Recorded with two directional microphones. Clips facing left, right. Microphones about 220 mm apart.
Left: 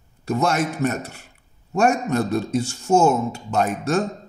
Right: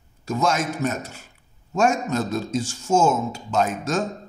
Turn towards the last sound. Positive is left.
turn(degrees=60)  # may be behind; listen again after turning